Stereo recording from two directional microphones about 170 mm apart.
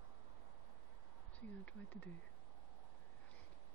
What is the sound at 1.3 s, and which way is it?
Speech, 10° left (ahead or behind).